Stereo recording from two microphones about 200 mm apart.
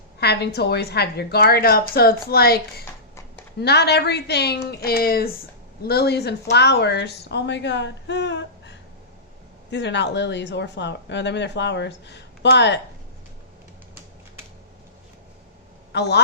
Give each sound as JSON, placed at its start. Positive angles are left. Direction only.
{"t": 0.2, "sound": "a woman's voice", "side_deg": 55}
{"t": 15.9, "sound": "a man's voice", "side_deg": 55}